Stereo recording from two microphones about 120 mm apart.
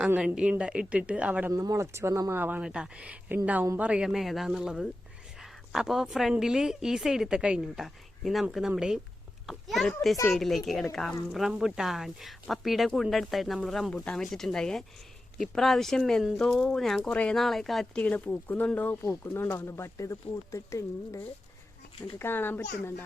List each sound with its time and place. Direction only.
0.0 s speech: 15° right (ahead or behind)
1.5 s a woman's voice: 25° right (ahead or behind); by 18.0 s centre (ahead or behind)
18.0 s speech: 15° left (ahead or behind)